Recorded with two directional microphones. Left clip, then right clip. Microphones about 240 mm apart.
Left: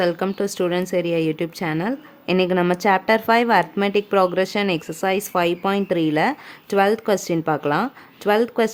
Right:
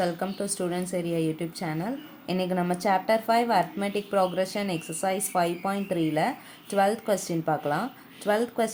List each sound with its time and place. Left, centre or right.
0.0 s a woman's voice: left